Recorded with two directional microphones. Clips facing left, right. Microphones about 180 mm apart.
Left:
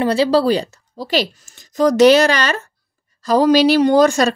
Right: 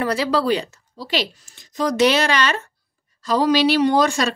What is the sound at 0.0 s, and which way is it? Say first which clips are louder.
A woman's voice: left 6 dB; 30° left (ahead or behind).